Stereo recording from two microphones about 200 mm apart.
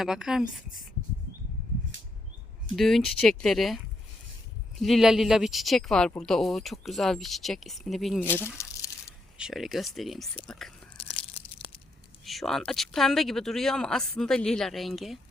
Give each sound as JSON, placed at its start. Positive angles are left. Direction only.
{"t": 0.0, "sound": "speech", "side_deg": 0}
{"t": 2.7, "sound": "speech", "side_deg": 0}
{"t": 4.8, "sound": "speech", "side_deg": 0}
{"t": 8.3, "sound": "crumpling", "side_deg": 10}
{"t": 9.4, "sound": "speech", "side_deg": 0}
{"t": 10.9, "sound": "crunch", "side_deg": 25}
{"t": 12.2, "sound": "speech", "side_deg": 0}